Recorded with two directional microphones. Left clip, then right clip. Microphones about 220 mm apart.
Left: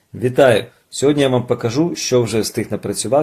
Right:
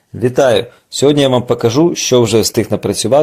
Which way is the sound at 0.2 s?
20° right (ahead or behind).